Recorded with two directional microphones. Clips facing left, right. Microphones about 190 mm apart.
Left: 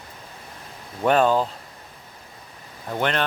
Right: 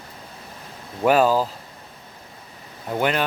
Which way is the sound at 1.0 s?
5° right (ahead or behind).